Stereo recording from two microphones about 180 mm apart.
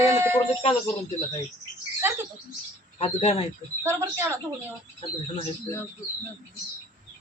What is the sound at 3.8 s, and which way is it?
Child singing, 15° right (ahead or behind).